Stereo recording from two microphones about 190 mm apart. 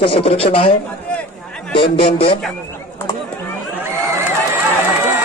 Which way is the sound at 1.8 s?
30° left (ahead or behind).